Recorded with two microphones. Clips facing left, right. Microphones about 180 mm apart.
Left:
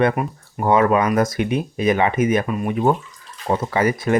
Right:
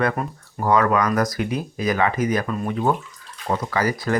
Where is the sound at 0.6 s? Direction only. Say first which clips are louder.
Left 3 dB; 25° left (ahead or behind).